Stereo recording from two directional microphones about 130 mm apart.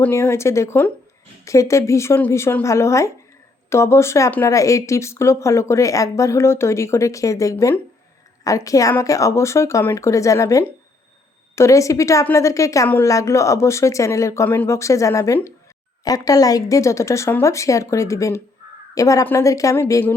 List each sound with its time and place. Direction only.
0.0 s a woman's voice: 20° left (ahead or behind)